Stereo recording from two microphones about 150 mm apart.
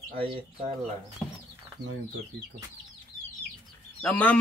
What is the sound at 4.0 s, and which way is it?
Speech, 10° left (ahead or behind).